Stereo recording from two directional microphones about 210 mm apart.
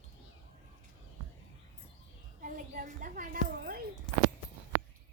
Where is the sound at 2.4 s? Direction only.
40° right (ahead or behind).